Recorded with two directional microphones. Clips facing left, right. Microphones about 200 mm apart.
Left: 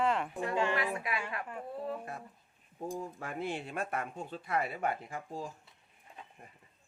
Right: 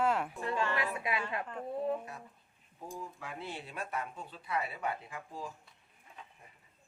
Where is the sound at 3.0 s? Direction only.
50° left (ahead or behind).